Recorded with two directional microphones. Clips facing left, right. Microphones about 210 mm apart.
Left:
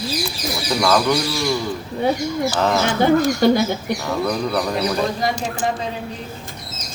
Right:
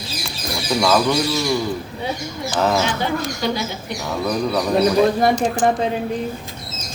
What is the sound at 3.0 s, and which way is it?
Speech, 50° left (ahead or behind).